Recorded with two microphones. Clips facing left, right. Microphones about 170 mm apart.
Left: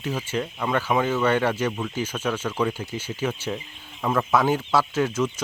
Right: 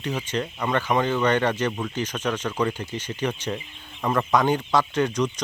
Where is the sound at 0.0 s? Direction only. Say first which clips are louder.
Even; 5° left (ahead or behind).